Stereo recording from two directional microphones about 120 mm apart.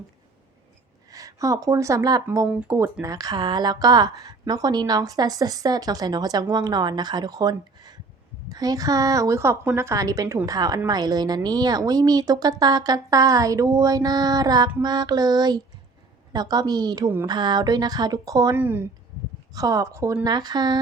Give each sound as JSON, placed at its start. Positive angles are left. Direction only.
{"t": 1.1, "sound": "a woman's voice", "side_deg": -30}
{"t": 18.5, "sound": "a woman's voice", "side_deg": -15}
{"t": 19.5, "sound": "a woman's voice", "side_deg": -30}
{"t": 20.2, "sound": "a woman's voice", "side_deg": -35}